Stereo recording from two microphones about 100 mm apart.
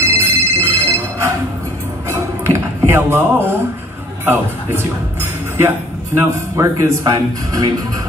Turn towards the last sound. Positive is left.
turn(degrees=-40)  # may be behind; listen again after turning